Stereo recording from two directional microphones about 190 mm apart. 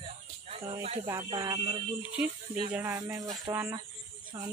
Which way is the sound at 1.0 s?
20° right (ahead or behind).